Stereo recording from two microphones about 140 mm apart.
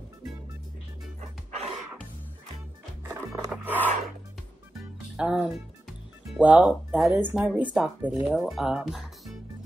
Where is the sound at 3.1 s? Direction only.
20° right (ahead or behind).